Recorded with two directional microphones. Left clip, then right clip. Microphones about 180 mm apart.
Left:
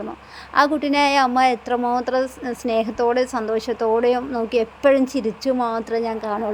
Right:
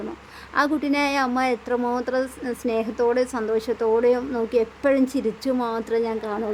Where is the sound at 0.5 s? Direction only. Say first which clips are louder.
Left 4 dB; 15° left (ahead or behind).